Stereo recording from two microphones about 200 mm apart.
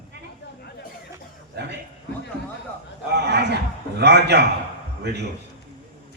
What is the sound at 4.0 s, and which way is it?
Speech, 55° right (ahead or behind).